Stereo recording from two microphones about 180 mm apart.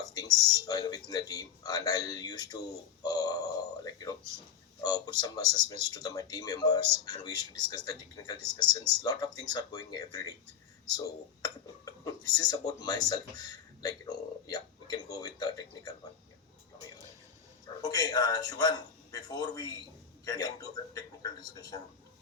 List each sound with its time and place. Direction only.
0.0 s speech: 20° left (ahead or behind)
11.4 s speech: 20° left (ahead or behind)
17.8 s speech: 20° left (ahead or behind)